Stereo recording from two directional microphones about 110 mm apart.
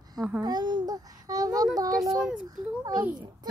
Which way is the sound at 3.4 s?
40° right (ahead or behind).